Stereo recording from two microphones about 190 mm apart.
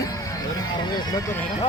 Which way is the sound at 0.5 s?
20° left (ahead or behind).